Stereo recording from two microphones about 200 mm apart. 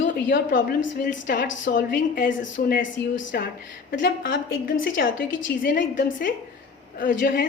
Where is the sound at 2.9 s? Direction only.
70° left (ahead or behind).